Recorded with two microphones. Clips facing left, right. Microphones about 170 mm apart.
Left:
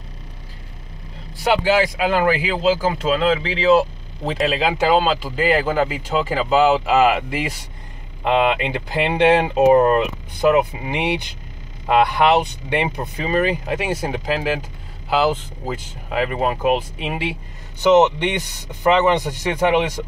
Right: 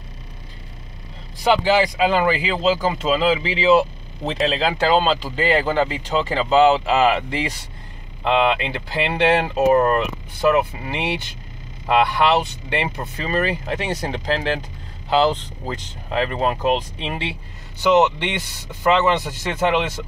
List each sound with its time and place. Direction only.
1.4 s speech: 5° left (ahead or behind)
6.7 s speech: 15° left (ahead or behind)